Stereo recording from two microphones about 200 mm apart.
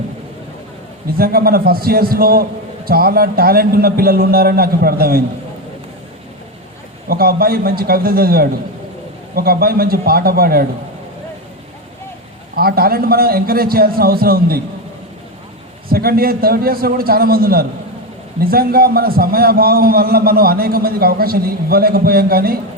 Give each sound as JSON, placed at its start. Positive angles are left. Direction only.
{"t": 1.2, "sound": "a man's voice", "side_deg": -50}
{"t": 7.1, "sound": "a man's voice", "side_deg": -50}
{"t": 12.5, "sound": "a man's voice", "side_deg": -50}
{"t": 15.9, "sound": "a man's voice", "side_deg": -50}